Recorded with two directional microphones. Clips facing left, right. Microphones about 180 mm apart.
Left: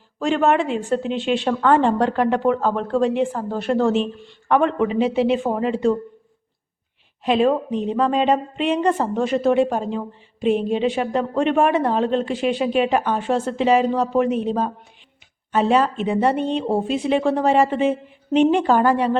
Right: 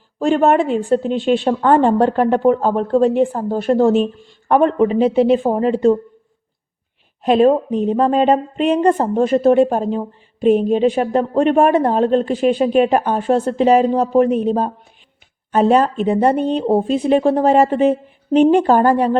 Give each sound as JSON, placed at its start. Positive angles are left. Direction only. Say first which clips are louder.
{"t": 0.2, "sound": "speech", "louder": "right 4 dB", "side_deg": -40}
{"t": 7.3, "sound": "a woman's voice", "louder": "right 5 dB", "side_deg": -40}
{"t": 18.5, "sound": "speech", "louder": "right 4 dB", "side_deg": -40}